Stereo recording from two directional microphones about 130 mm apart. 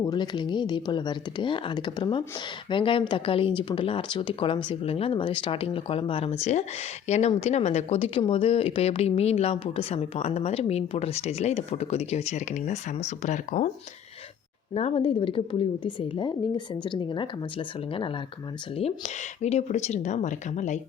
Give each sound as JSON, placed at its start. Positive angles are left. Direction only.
{"t": 0.0, "sound": "a woman's voice", "side_deg": 35}
{"t": 14.7, "sound": "a woman's voice", "side_deg": 50}
{"t": 18.8, "sound": "speech", "side_deg": 55}